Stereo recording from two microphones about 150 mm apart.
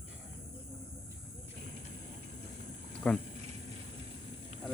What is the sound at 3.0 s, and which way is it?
Speech, 10° left (ahead or behind).